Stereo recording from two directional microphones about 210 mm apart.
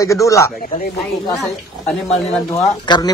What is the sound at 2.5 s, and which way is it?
Speech, 20° left (ahead or behind).